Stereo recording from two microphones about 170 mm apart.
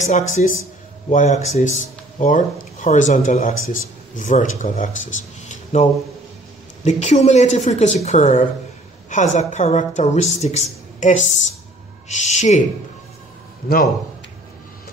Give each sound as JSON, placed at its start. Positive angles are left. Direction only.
{"t": 0.0, "sound": "a woman's voice", "side_deg": 45}